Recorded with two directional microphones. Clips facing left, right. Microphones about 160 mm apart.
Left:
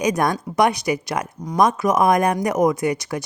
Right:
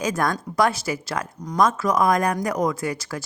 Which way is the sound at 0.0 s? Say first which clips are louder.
Left 4 dB; 20° left (ahead or behind).